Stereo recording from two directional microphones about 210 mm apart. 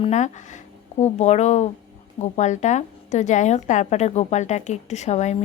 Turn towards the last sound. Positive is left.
turn(degrees=35)  # may be behind; listen again after turning